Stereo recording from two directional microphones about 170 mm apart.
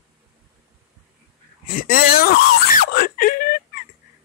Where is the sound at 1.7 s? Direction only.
60° left (ahead or behind).